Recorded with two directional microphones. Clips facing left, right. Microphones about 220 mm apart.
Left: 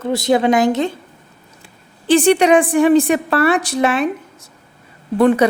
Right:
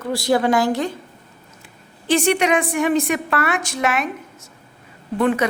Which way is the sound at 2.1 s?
30° left (ahead or behind).